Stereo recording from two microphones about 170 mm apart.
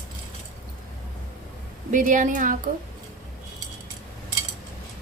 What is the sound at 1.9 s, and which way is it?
Speech, 50° right (ahead or behind).